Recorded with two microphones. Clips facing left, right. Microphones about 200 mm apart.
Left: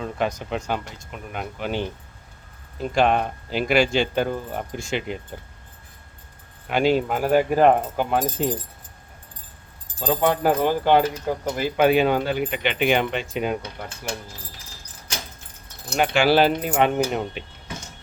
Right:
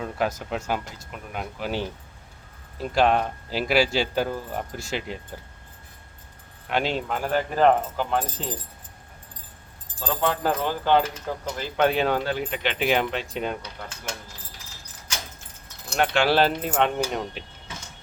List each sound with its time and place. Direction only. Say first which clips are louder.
0.0 s speech: left 1 dB; 5° right (ahead or behind)
6.7 s speech: left 6 dB; 5° left (ahead or behind)
10.0 s speech: left 5 dB; 15° left (ahead or behind)
16.0 s speech: left 3 dB; centre (ahead or behind)